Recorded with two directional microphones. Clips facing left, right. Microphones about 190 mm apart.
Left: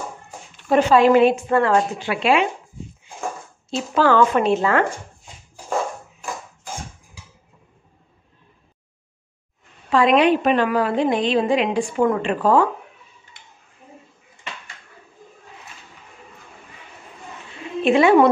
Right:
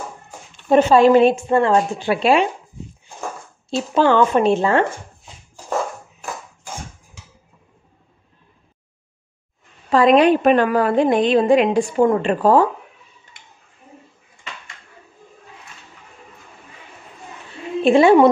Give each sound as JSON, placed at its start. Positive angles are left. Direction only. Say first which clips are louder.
{"t": 0.7, "sound": "a woman's voice", "louder": "right 2 dB", "side_deg": -25}
{"t": 3.9, "sound": "speech", "louder": "right 1 dB", "side_deg": -25}
{"t": 9.8, "sound": "a woman's voice", "louder": "right 3 dB", "side_deg": -40}
{"t": 17.8, "sound": "a woman's voice", "louder": "right 3 dB", "side_deg": -30}